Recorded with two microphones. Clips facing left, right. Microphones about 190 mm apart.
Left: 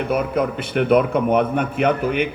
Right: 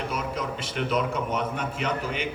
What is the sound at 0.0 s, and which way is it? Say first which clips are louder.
A man's voice: left 10 dB; 60° left (ahead or behind).